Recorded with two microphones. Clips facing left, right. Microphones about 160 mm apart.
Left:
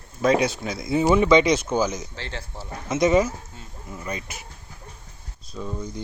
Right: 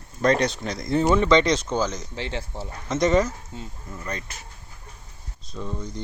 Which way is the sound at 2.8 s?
5° left (ahead or behind).